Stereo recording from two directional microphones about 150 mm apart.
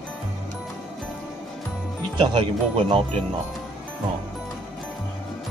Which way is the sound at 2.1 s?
35° right (ahead or behind).